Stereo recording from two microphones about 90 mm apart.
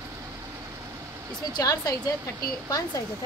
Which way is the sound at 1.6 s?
40° left (ahead or behind).